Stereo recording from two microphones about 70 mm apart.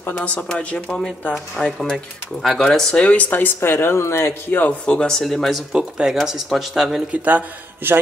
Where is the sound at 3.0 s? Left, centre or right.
Left.